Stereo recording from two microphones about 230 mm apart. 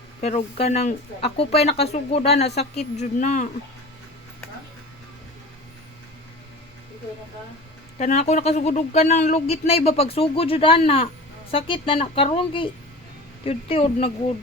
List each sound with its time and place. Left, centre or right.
0.2 s speech: left
7.9 s speech: left